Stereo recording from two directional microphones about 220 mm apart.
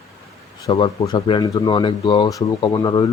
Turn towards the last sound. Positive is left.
turn(degrees=20)  # may be behind; listen again after turning